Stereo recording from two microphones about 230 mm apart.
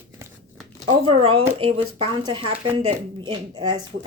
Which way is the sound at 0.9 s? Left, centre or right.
Right.